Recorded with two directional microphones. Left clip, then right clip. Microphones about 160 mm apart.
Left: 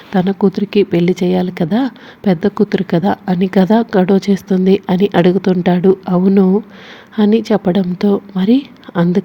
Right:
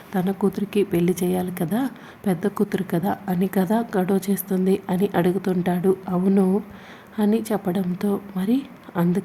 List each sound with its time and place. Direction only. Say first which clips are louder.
0.1 s speech: left 9 dB; 25° left (ahead or behind)